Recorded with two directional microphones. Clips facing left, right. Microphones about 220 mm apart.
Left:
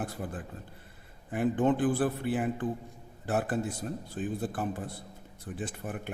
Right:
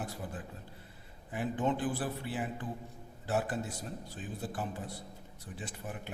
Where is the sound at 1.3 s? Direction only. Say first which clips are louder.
Left 6 dB; 55° left (ahead or behind).